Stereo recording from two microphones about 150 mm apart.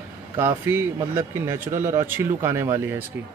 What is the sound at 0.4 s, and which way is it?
Speech, 15° right (ahead or behind).